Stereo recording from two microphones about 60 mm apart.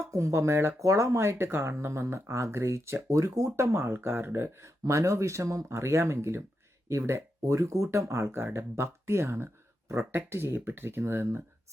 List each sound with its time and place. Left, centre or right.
0.0 s speech: right
0.8 s speech: right
3.5 s speech: right
4.8 s speech: right